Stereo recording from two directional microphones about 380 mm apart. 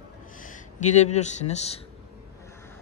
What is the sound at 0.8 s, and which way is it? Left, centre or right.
Speech, centre.